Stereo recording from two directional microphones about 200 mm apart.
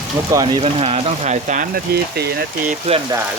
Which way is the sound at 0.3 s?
20° right (ahead or behind).